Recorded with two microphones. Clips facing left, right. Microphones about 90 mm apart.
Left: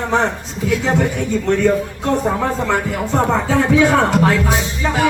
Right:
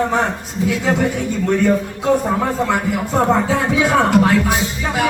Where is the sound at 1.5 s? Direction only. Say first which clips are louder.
Even; 5° right (ahead or behind).